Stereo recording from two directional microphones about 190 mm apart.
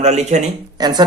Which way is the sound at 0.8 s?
20° right (ahead or behind).